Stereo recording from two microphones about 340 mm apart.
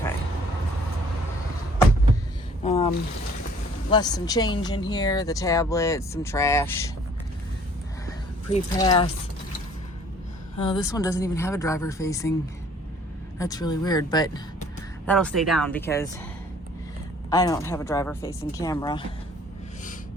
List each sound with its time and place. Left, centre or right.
2.6 s a sound: centre
3.8 s speech: centre
8.5 s speech: centre
10.6 s speech: centre
13.4 s speech: centre
17.2 s speech: centre